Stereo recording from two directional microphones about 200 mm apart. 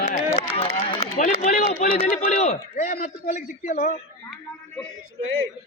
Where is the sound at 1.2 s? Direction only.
35° left (ahead or behind).